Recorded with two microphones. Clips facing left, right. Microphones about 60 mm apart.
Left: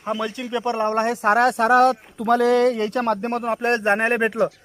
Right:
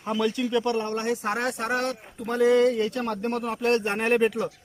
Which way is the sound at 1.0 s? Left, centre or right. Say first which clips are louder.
Left 9 dB; left.